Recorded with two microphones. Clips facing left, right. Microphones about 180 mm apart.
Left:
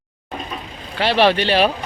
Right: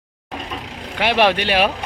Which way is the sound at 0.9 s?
15° right (ahead or behind).